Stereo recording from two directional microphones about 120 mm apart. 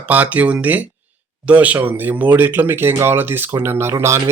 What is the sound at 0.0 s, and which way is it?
Speech, 15° right (ahead or behind).